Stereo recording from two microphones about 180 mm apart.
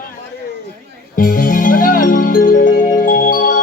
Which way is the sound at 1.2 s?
50° left (ahead or behind).